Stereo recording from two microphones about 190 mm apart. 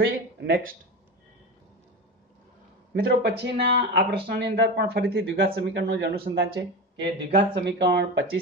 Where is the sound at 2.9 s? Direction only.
60° right (ahead or behind).